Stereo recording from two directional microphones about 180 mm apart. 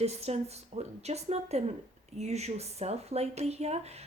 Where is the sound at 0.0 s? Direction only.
35° right (ahead or behind).